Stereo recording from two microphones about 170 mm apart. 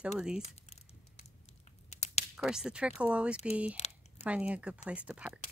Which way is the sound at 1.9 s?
40° left (ahead or behind).